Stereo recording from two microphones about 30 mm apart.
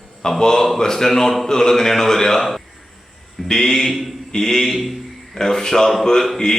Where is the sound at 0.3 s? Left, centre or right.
Centre.